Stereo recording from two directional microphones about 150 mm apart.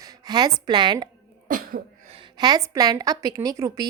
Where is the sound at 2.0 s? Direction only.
35° right (ahead or behind).